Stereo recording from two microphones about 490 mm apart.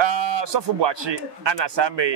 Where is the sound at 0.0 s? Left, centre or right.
Right.